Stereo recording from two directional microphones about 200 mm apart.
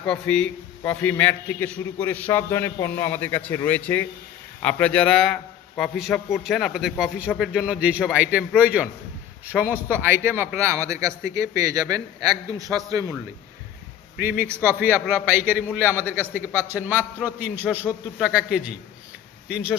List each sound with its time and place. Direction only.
0.0 s a man's voice: 5° left (ahead or behind); by 13.1 s 15° right (ahead or behind)
14.2 s a man's voice: 10° right (ahead or behind)